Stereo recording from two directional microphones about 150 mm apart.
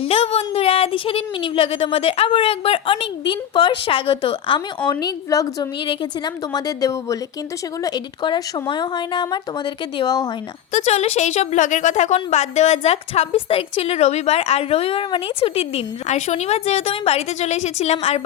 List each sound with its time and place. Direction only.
0.0 s speech: 40° left (ahead or behind)
10.7 s a woman's voice: 45° left (ahead or behind)